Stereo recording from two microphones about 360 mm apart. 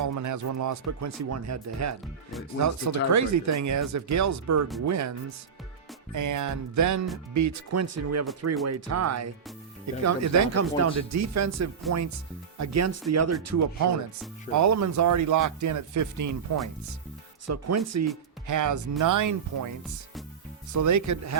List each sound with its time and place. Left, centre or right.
0.0 s speech: right
6.1 s speech: right
17.4 s speech: right
20.7 s speech: right